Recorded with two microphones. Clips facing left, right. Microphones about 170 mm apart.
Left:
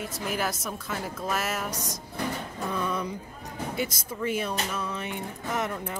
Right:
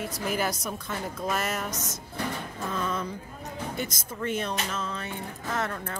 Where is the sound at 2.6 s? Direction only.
15° left (ahead or behind).